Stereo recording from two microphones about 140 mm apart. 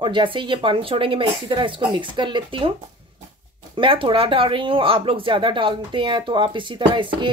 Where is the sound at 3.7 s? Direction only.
40° right (ahead or behind).